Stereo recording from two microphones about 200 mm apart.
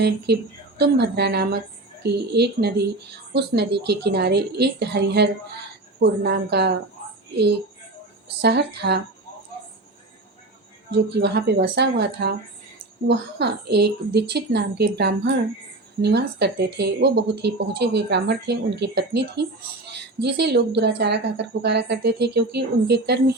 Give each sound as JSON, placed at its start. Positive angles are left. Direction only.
{"t": 0.8, "sound": "a woman's voice", "side_deg": -55}
{"t": 8.4, "sound": "a woman's voice", "side_deg": -55}
{"t": 10.9, "sound": "a woman's voice", "side_deg": -55}